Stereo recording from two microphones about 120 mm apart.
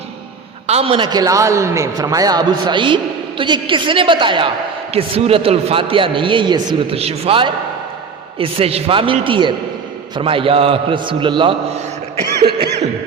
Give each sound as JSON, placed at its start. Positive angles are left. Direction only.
{"t": 0.7, "sound": "a man's voice", "side_deg": -55}
{"t": 0.9, "sound": "a man's voice", "side_deg": -35}
{"t": 6.9, "sound": "a man's voice", "side_deg": -55}